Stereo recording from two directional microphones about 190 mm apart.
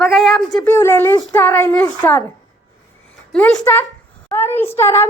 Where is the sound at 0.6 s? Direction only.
15° left (ahead or behind).